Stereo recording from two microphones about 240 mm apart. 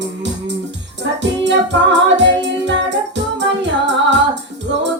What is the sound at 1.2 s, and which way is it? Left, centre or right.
Music, right.